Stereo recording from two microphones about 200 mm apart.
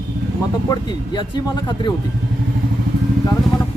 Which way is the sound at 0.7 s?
20° left (ahead or behind).